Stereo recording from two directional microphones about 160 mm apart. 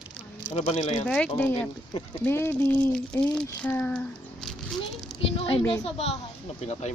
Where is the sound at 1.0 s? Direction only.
5° left (ahead or behind).